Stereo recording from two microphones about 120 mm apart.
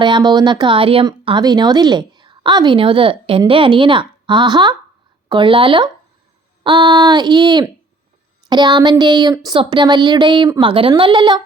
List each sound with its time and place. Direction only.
0.0 s a woman's voice: 40° right (ahead or behind)